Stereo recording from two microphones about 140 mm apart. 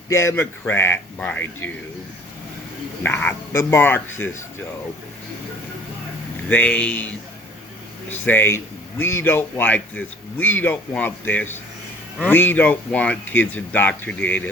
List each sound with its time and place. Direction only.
0.1 s a man's voice: 20° left (ahead or behind)
3.0 s a man's voice: 10° left (ahead or behind)
6.5 s a man's voice: 10° left (ahead or behind)
8.1 s a man's voice: 15° left (ahead or behind)